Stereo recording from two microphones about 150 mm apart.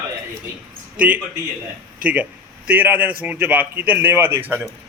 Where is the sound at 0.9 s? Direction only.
10° right (ahead or behind).